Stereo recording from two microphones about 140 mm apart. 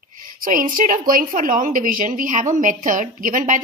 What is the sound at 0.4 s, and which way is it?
A woman's voice, 75° right (ahead or behind).